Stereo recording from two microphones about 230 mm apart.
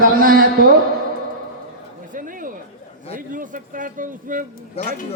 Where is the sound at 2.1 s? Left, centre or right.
Right.